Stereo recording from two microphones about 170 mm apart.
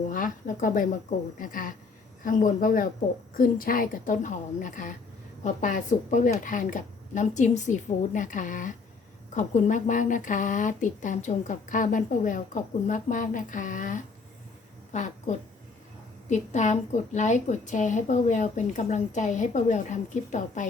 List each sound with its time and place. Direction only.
0.1 s a woman's voice: 55° left (ahead or behind)